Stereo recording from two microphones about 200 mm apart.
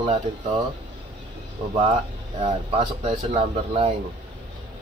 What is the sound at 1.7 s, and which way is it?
Speech, 30° right (ahead or behind).